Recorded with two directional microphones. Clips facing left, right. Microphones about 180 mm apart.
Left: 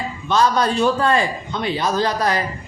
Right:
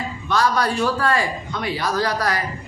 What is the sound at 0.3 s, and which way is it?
A man's voice, 20° left (ahead or behind).